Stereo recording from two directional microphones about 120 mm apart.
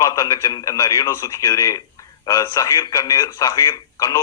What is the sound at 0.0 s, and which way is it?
A man's voice, 30° left (ahead or behind).